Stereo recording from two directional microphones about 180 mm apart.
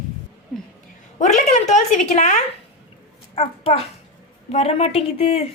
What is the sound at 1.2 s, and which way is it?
A child's voice, 40° left (ahead or behind).